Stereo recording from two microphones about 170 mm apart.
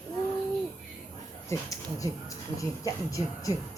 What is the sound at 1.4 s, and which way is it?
Speech, 20° left (ahead or behind).